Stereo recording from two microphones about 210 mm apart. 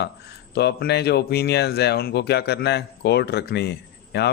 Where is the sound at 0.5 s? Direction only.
50° left (ahead or behind).